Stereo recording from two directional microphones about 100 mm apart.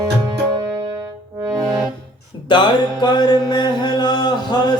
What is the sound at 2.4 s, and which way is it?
Music, 55° left (ahead or behind).